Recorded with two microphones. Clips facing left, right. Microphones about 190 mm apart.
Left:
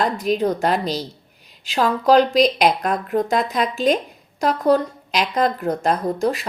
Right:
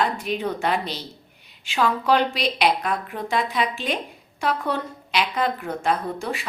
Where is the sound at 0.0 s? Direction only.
40° left (ahead or behind).